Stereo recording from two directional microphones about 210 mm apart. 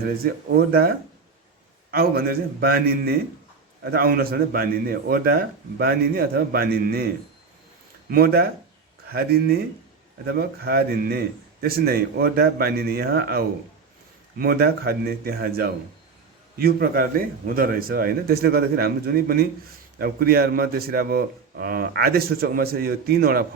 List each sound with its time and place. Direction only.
0.0 s a man's voice: 45° right (ahead or behind)
8.1 s a man's voice: 45° right (ahead or behind)